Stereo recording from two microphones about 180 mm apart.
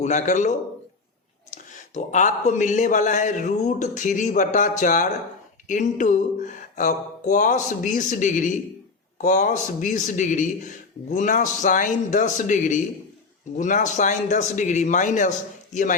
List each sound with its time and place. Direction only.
0.0 s a man's voice: 40° left (ahead or behind)